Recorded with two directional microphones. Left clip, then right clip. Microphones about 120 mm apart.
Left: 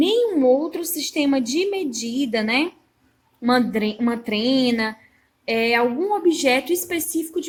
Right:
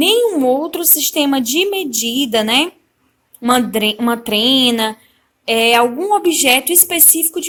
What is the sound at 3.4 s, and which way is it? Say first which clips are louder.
A woman's voice: right 6 dB; 25° right (ahead or behind).